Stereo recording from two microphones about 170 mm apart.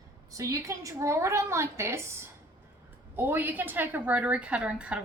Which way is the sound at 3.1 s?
10° right (ahead or behind).